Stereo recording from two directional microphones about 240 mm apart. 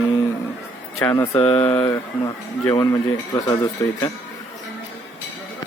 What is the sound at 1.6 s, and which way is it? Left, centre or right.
Speech, centre.